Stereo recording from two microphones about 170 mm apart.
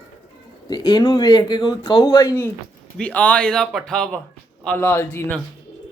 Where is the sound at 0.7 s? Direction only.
20° left (ahead or behind).